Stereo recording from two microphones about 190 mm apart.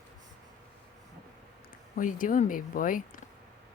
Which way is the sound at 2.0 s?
45° left (ahead or behind).